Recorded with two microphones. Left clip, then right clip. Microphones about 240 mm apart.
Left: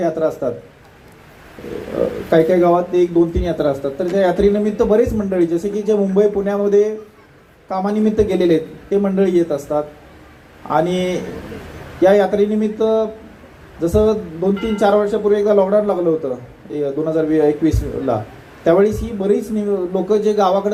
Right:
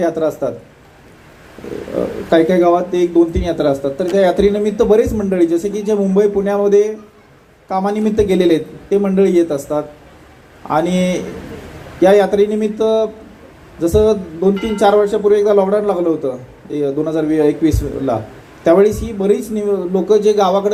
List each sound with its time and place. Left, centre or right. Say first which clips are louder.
0.0 s speech: right 2 dB; right
2.3 s speech: right 2 dB; right